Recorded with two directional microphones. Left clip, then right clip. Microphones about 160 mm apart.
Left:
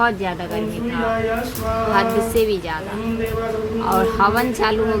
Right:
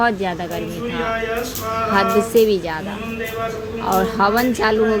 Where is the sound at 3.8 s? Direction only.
25° right (ahead or behind).